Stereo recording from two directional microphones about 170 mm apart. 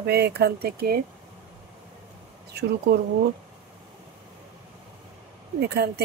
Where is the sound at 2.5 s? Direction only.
70° right (ahead or behind).